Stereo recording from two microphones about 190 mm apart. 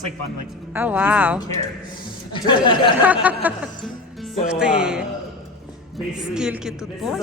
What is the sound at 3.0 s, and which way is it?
A man's voice, 10° right (ahead or behind).